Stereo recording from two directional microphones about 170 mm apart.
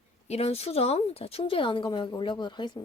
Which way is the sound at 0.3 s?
35° left (ahead or behind).